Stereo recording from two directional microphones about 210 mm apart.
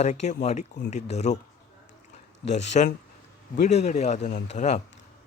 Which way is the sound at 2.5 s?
35° left (ahead or behind).